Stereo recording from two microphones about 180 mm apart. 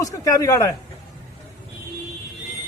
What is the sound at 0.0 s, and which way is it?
Speech, 20° left (ahead or behind).